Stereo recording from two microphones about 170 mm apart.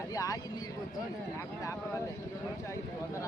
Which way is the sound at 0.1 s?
20° left (ahead or behind).